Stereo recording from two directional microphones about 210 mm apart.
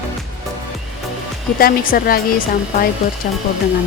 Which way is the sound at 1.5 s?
45° left (ahead or behind).